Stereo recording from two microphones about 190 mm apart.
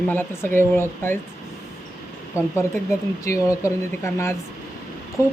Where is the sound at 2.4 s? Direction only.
15° left (ahead or behind).